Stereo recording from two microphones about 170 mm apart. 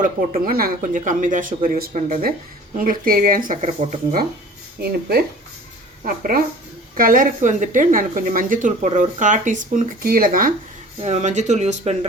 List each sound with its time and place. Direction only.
0.0 s speech: 60° right (ahead or behind)
3.6 s speech: 40° right (ahead or behind)
4.8 s speech: 65° right (ahead or behind)
11.0 s speech: 45° right (ahead or behind)